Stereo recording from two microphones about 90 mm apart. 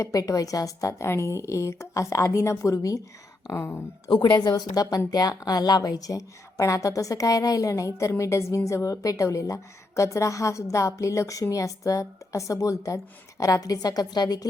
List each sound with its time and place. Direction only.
0.0 s a woman's voice: 40° left (ahead or behind)
4.1 s a woman's voice: 55° left (ahead or behind)